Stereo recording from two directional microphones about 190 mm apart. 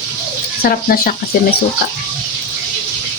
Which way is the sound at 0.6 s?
50° left (ahead or behind).